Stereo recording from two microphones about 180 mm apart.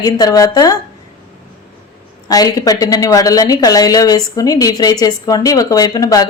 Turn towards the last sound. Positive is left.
turn(degrees=20)  # may be behind; listen again after turning